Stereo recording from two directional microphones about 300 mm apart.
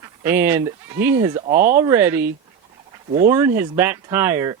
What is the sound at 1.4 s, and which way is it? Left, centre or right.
Speech, right.